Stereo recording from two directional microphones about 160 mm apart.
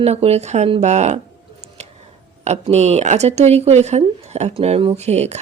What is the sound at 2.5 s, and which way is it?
Speech, 45° right (ahead or behind).